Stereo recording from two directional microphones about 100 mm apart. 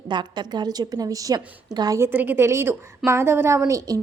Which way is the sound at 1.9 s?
25° right (ahead or behind).